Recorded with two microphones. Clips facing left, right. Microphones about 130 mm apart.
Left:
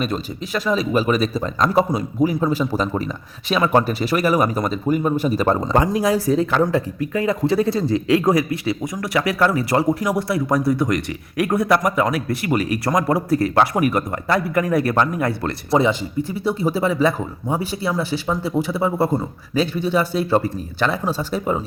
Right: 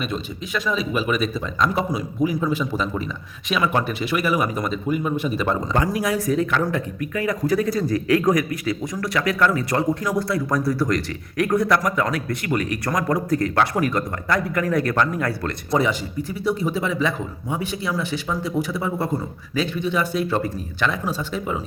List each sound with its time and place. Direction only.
0.0 s a man's voice: 40° left (ahead or behind)